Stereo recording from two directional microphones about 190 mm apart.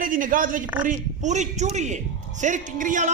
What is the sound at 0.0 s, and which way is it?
A woman's voice, 45° right (ahead or behind).